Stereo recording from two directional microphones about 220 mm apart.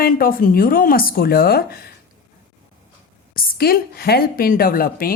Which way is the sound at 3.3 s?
40° left (ahead or behind).